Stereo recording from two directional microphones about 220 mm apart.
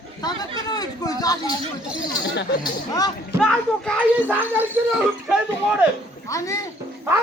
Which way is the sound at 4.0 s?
10° right (ahead or behind).